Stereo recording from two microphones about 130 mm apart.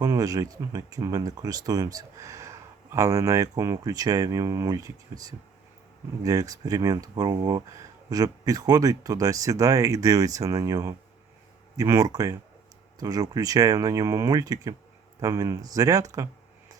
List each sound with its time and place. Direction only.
0.0 s speech: 30° right (ahead or behind)